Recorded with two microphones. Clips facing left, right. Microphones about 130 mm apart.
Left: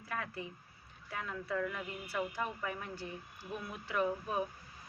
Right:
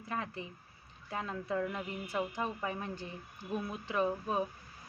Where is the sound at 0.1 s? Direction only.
25° right (ahead or behind).